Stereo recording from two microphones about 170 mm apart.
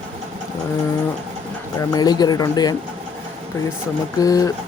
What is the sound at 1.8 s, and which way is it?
Speech, 20° left (ahead or behind).